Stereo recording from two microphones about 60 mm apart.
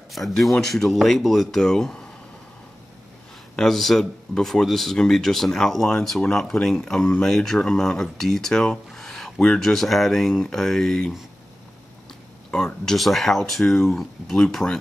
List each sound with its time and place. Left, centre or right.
0.1 s speech: centre
3.5 s speech: centre
6.8 s speech: centre
12.4 s speech: centre